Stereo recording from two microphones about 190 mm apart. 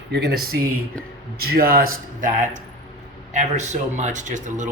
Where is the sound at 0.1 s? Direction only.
60° right (ahead or behind).